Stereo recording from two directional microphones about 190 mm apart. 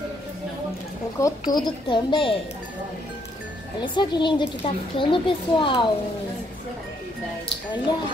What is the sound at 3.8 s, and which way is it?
A woman's voice, 25° left (ahead or behind).